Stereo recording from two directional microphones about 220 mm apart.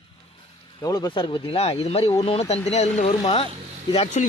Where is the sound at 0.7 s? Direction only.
15° left (ahead or behind).